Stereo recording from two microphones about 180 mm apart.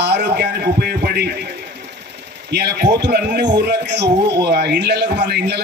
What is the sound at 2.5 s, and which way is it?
A man's voice, 65° right (ahead or behind).